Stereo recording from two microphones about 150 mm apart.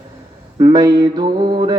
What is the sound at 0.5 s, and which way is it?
Mantra, 30° right (ahead or behind).